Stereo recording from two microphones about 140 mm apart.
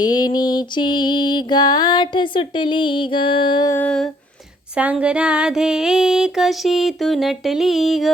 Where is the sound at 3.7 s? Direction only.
10° left (ahead or behind).